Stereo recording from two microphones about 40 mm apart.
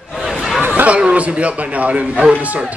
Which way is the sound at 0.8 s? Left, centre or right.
Right.